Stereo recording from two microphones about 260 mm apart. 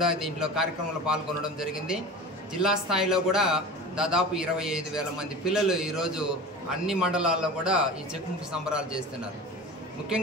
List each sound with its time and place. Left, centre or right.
0.0 s a man's voice: centre